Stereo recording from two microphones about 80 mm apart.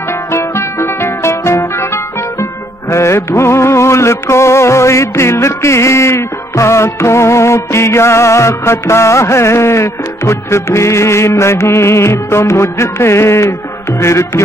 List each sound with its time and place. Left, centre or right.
0.3 s music: left
2.9 s music: left